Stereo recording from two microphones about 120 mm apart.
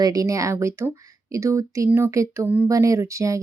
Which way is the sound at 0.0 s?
30° right (ahead or behind).